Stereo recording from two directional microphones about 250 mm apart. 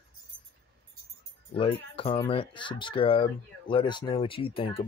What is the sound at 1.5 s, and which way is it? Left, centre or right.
Speech, left.